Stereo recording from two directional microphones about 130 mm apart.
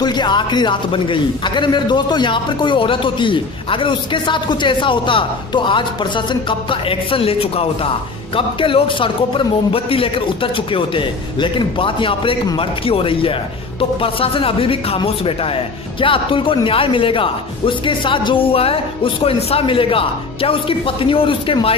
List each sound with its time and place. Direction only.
0.0 s speech: 35° left (ahead or behind)